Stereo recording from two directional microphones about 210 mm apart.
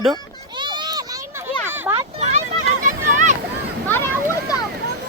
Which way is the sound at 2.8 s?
40° right (ahead or behind).